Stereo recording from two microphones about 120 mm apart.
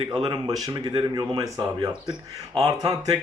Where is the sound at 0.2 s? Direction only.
35° right (ahead or behind).